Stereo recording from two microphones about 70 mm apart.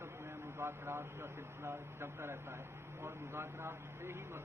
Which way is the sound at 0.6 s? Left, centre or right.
Right.